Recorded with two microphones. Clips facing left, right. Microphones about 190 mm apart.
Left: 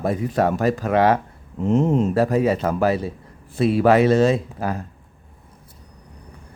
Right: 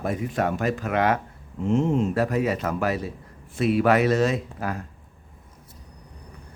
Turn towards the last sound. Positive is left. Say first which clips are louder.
# left 5 dB
turn(degrees=30)  # may be behind; listen again after turning